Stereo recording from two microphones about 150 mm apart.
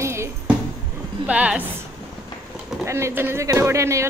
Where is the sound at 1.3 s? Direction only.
10° right (ahead or behind).